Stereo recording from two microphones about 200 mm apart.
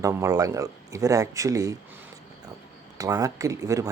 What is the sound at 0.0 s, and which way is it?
Speech, 15° right (ahead or behind).